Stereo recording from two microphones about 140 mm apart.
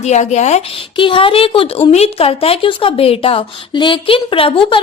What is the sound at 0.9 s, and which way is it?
A woman's voice, 40° left (ahead or behind).